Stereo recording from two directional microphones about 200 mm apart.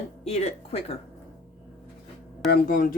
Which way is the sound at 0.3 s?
30° left (ahead or behind).